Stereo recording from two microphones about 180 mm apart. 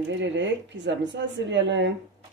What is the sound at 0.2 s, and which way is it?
Speech, 80° right.